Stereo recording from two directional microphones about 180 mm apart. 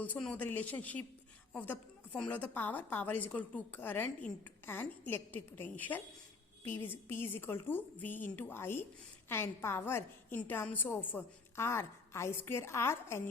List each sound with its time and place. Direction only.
0.0 s a woman's voice: 5° left (ahead or behind)